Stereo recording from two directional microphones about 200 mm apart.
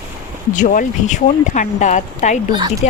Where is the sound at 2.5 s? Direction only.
20° right (ahead or behind).